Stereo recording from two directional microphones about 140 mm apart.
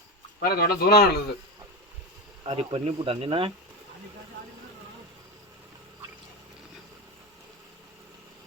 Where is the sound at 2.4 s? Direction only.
40° right (ahead or behind).